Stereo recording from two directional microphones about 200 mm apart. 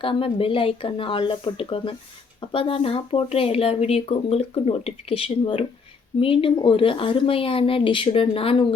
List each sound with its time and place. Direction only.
0.0 s speech: 25° left (ahead or behind)